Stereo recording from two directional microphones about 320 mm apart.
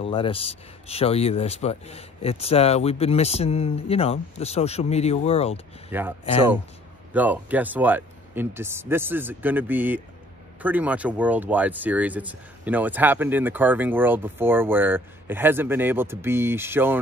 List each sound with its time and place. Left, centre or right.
0.0 s speech: centre
5.9 s speech: centre
7.2 s speech: centre